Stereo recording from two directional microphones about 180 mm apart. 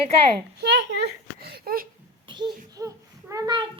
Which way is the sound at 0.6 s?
75° right (ahead or behind).